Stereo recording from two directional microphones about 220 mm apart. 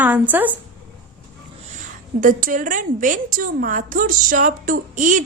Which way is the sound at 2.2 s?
40° right (ahead or behind).